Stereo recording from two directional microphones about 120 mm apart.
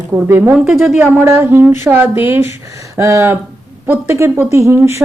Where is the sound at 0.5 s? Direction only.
5° right (ahead or behind).